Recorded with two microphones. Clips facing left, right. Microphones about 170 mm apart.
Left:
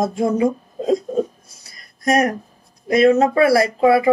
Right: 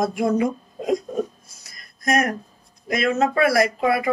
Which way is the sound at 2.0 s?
30° left (ahead or behind).